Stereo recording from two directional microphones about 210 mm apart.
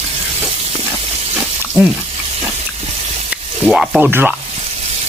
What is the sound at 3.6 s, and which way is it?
Speech, centre (ahead or behind).